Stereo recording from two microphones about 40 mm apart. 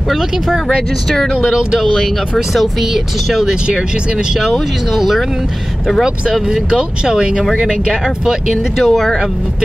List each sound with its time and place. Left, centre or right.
1.1 s speech: centre
1.4 s speech: centre
2.3 s speech: centre
6.5 s speech: centre
8.7 s speech: centre